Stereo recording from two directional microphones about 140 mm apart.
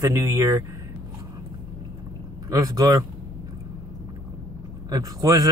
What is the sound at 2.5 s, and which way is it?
Speech, 25° right (ahead or behind).